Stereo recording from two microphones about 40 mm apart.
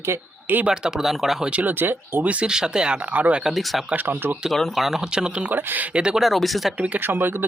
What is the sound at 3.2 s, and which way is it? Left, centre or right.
Speech, right.